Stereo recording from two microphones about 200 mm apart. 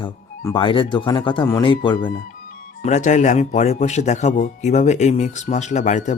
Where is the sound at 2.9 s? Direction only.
35° left (ahead or behind).